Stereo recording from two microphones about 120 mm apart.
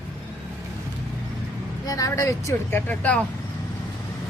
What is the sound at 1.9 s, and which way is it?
Speech, 30° left (ahead or behind).